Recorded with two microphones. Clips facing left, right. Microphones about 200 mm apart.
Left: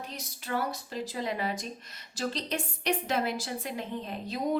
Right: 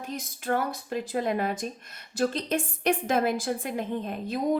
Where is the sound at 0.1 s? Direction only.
50° right (ahead or behind).